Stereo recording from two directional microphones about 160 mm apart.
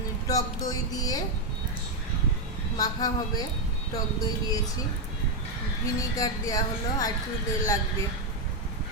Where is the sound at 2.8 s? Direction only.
25° left (ahead or behind).